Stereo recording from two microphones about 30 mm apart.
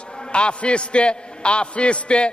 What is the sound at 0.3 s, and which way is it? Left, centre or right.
Speech, left.